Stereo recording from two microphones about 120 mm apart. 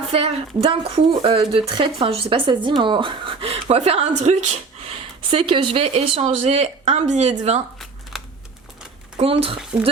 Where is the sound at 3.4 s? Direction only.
60° right (ahead or behind).